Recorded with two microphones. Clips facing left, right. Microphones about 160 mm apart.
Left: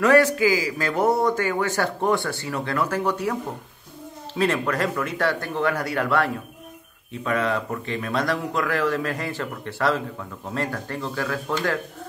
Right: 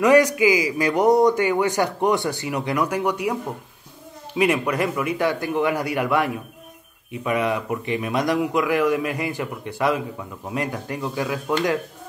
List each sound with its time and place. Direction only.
0.0 s speech: 15° right (ahead or behind)